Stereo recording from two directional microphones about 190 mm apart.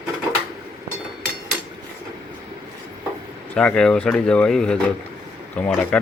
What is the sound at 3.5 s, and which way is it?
Speech, 5° left (ahead or behind).